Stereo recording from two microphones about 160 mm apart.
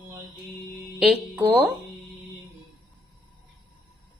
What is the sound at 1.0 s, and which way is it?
Speech, centre (ahead or behind).